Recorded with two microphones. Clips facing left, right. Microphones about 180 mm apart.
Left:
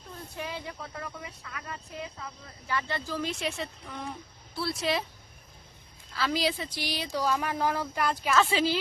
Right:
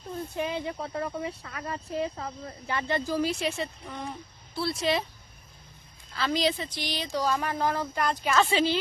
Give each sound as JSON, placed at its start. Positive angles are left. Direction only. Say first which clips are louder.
{"t": 0.3, "sound": "speech", "louder": "right 6 dB", "side_deg": -20}
{"t": 2.6, "sound": "speech", "louder": "right 4 dB", "side_deg": -20}
{"t": 3.3, "sound": "a woman's voice", "louder": "right 3 dB", "side_deg": 0}
{"t": 6.1, "sound": "a woman's voice", "louder": "right 2 dB", "side_deg": 5}